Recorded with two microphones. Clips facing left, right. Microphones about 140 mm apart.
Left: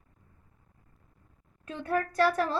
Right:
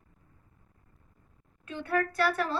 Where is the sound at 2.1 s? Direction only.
40° left (ahead or behind).